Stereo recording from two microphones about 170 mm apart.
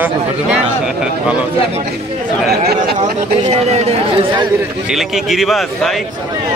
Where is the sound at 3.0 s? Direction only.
40° right (ahead or behind).